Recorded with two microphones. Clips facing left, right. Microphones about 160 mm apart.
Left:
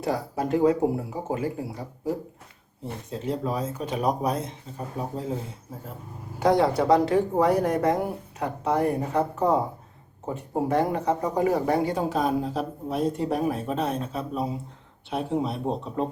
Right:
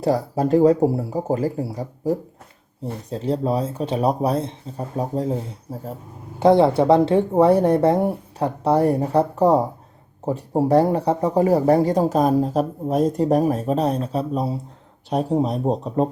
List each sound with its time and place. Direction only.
0.0 s speech: 35° right (ahead or behind)
6.4 s speech: 25° right (ahead or behind)